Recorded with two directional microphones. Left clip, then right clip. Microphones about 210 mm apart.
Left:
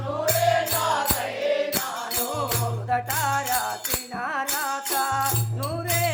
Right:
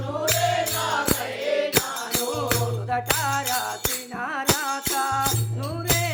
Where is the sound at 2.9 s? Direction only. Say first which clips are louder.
Even; centre (ahead or behind).